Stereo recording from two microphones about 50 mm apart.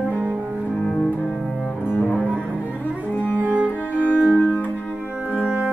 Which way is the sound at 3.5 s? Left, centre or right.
Right.